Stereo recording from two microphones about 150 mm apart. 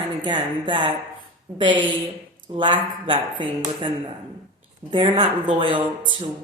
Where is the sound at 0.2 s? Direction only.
30° right (ahead or behind).